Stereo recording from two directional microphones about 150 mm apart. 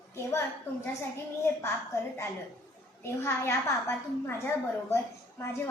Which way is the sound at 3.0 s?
15° left (ahead or behind).